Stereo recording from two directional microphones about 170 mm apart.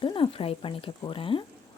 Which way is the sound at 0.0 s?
30° left (ahead or behind).